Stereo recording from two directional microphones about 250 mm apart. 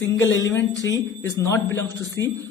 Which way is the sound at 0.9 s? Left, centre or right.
Centre.